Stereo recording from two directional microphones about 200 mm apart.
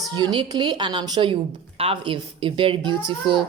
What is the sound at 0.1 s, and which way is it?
A woman's voice, 25° right (ahead or behind).